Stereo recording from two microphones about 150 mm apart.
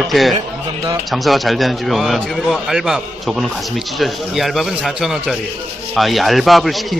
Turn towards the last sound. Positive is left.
turn(degrees=0)  # may be behind; listen again after turning